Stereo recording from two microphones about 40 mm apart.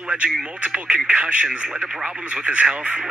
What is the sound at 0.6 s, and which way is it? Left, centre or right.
Speech, right.